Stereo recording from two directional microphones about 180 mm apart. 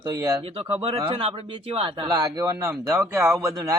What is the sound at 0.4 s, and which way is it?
Speech, 35° right (ahead or behind).